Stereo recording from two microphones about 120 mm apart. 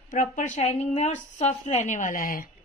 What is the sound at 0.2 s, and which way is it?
A woman's voice, 80° left.